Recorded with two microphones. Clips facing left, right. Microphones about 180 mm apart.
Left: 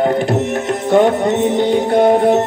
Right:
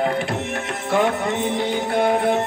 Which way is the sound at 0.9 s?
35° left (ahead or behind).